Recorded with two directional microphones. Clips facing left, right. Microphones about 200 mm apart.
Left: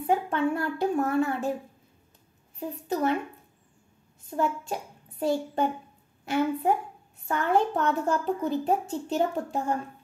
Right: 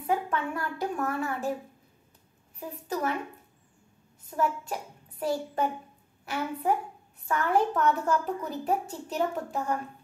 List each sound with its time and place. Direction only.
0.0 s a woman's voice: 30° left (ahead or behind)
2.9 s a woman's voice: 25° left (ahead or behind)
4.3 s a woman's voice: 25° left (ahead or behind)